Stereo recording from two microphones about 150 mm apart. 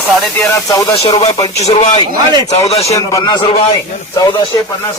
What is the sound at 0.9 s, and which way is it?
Speech, 40° left (ahead or behind).